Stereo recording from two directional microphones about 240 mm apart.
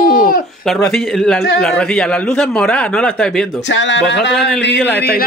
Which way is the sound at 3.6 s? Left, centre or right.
Left.